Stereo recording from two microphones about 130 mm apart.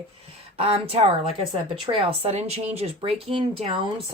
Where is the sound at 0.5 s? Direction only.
50° right (ahead or behind).